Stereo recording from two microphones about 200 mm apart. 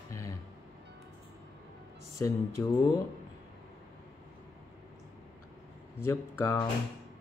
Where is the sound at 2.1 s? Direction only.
15° left (ahead or behind).